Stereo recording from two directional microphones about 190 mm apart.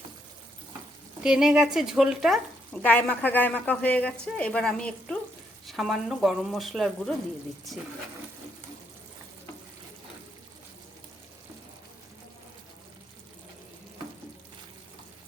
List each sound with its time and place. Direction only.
1.2 s speech: 5° right (ahead or behind)